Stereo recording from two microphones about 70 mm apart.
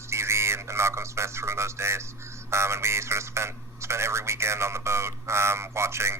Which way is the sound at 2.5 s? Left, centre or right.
Right.